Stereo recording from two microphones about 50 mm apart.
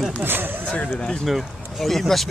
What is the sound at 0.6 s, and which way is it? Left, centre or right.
Speech, left.